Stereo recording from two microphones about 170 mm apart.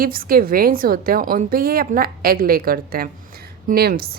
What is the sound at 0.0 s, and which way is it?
A woman's voice, 60° right (ahead or behind).